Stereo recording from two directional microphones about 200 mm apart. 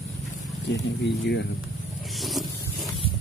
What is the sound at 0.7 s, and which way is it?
Speech, 60° left (ahead or behind).